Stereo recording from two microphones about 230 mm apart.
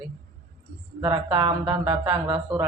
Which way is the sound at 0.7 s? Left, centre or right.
Right.